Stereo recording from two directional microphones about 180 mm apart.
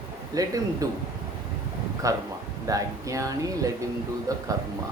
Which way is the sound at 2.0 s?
20° right (ahead or behind).